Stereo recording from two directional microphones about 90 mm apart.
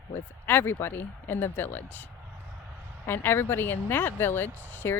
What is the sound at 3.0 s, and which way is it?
Speech, 25° left (ahead or behind).